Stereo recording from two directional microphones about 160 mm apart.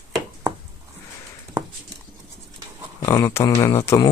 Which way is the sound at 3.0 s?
20° left (ahead or behind).